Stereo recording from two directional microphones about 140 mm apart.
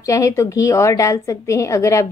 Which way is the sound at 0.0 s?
20° left (ahead or behind).